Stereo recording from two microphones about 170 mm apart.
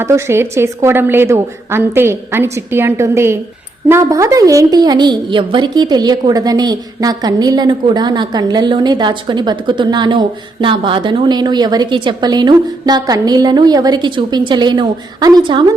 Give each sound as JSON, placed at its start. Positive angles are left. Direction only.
{"t": 0.0, "sound": "a woman's voice", "side_deg": -15}